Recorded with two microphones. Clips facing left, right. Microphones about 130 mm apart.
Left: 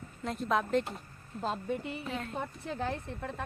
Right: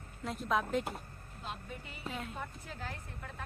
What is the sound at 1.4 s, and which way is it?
Speech, 35° left (ahead or behind).